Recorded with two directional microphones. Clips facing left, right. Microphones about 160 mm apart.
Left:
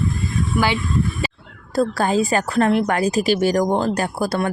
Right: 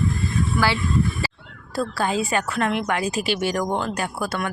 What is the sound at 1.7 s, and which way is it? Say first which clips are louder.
A woman's voice: left 5 dB; 45° left (ahead or behind).